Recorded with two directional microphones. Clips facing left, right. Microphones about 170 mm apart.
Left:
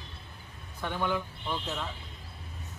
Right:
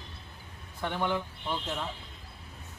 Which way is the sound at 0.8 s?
20° right (ahead or behind).